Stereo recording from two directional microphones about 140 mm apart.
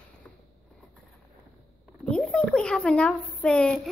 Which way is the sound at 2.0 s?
5° left (ahead or behind).